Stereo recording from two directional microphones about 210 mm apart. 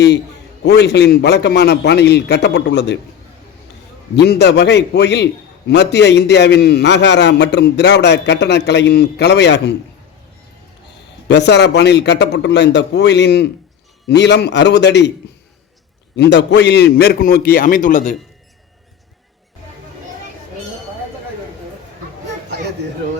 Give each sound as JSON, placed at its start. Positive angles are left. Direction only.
{"t": 0.6, "sound": "a man's voice", "side_deg": 55}
{"t": 4.1, "sound": "a man's voice", "side_deg": 50}
{"t": 11.3, "sound": "a man's voice", "side_deg": 55}
{"t": 16.1, "sound": "a man's voice", "side_deg": 55}